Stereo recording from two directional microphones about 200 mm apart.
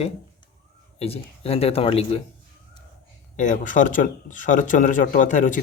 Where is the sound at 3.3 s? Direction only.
40° left (ahead or behind).